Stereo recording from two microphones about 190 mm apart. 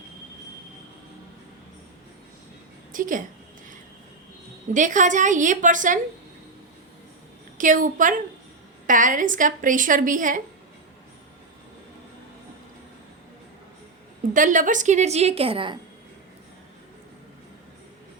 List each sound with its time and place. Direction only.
2.9 s speech: 45° right (ahead or behind)
4.7 s a woman's voice: 40° right (ahead or behind)
7.6 s a woman's voice: 45° right (ahead or behind)
14.3 s a woman's voice: 45° right (ahead or behind); by 15.8 s 25° right (ahead or behind)